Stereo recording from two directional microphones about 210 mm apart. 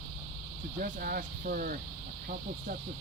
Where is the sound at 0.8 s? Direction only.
45° right (ahead or behind).